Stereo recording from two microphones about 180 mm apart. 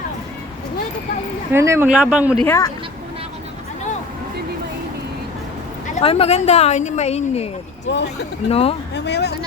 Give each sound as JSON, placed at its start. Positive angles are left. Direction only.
{"t": 1.5, "sound": "speech", "side_deg": -15}
{"t": 2.4, "sound": "speech", "side_deg": 15}
{"t": 6.0, "sound": "speech", "side_deg": 35}
{"t": 7.9, "sound": "speech", "side_deg": 75}
{"t": 8.4, "sound": "speech", "side_deg": 35}
{"t": 9.0, "sound": "speech", "side_deg": 65}